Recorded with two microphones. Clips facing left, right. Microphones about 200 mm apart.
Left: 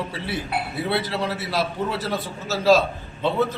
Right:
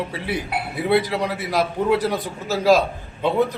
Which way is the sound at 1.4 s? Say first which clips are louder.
Right 3 dB; 15° right (ahead or behind).